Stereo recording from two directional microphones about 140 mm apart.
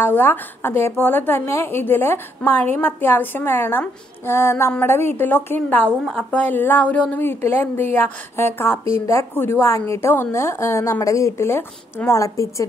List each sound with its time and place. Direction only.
0.0 s a woman's voice: 15° left (ahead or behind)